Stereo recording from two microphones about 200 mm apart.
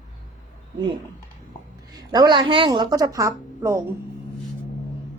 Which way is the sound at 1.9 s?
20° right (ahead or behind).